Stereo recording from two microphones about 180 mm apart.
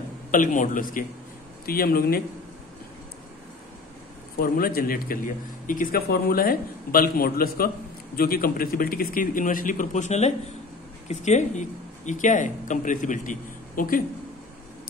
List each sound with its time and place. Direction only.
0.3 s a man's voice: 45° left (ahead or behind)
4.4 s a man's voice: 55° left (ahead or behind)